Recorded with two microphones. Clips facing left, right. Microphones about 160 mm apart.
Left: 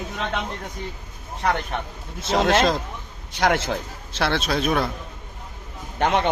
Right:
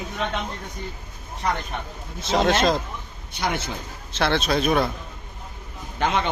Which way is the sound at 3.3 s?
90° left.